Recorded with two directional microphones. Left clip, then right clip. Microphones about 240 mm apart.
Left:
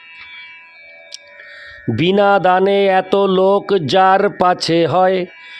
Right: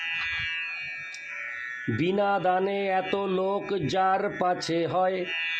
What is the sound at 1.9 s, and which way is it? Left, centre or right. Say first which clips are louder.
Speech: left 13 dB; left.